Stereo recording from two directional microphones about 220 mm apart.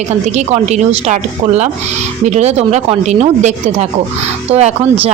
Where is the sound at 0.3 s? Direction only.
30° right (ahead or behind).